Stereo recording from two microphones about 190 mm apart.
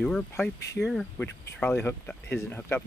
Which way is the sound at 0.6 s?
60° left (ahead or behind).